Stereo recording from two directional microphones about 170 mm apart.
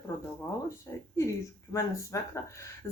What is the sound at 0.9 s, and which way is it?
Speech, 15° left (ahead or behind).